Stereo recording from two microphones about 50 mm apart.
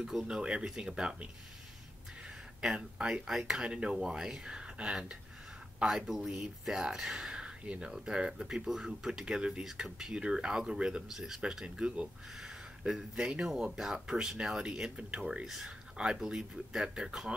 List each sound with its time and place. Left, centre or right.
0.0 s speech: centre
0.3 s speech: centre
2.6 s speech: centre
3.3 s speech: centre
3.6 s speech: centre
5.9 s speech: centre
12.4 s speech: centre
14.6 s speech: centre